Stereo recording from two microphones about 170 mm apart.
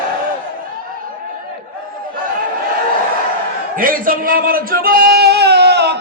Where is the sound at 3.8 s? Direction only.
55° right (ahead or behind); by 6.0 s 80° right.